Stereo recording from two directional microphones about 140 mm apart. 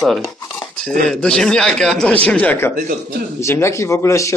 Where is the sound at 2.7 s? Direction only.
75° right (ahead or behind).